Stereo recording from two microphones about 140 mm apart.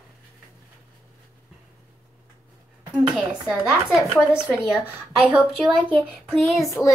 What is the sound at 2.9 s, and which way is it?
Speech, 5° right (ahead or behind).